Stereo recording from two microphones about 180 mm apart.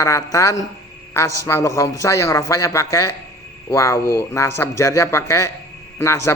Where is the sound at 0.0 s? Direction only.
20° left (ahead or behind).